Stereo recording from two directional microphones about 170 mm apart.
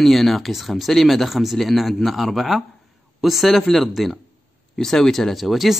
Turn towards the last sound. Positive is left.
turn(degrees=0)  # may be behind; listen again after turning